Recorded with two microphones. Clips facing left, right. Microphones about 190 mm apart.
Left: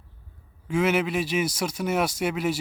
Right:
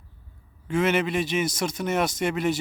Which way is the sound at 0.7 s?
10° left (ahead or behind).